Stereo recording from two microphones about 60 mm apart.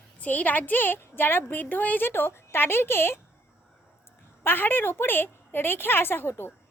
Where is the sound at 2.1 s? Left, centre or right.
Left.